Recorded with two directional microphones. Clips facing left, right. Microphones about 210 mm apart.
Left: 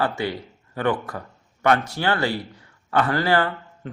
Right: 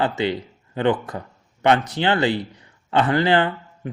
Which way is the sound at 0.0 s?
20° right (ahead or behind).